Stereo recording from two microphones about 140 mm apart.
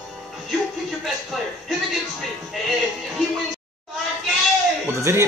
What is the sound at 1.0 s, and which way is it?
Speech, centre (ahead or behind).